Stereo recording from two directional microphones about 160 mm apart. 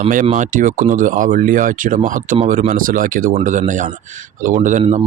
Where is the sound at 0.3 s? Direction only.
55° right (ahead or behind).